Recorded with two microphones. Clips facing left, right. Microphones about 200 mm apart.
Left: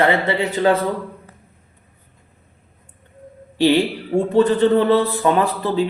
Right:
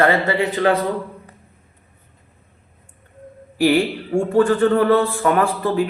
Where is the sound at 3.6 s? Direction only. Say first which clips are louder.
Left 1 dB; 25° left (ahead or behind).